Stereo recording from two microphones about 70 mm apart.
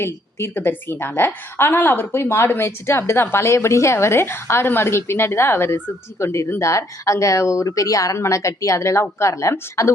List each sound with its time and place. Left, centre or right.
0.0 s a woman's voice: left